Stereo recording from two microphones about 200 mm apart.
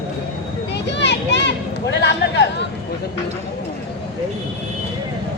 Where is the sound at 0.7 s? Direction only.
60° left (ahead or behind).